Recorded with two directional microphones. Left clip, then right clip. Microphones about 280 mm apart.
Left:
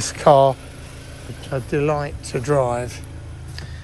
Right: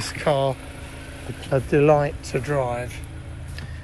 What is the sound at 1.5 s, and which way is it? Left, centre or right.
Speech, centre.